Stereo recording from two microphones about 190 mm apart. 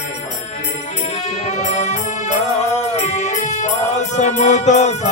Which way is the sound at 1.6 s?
40° left (ahead or behind).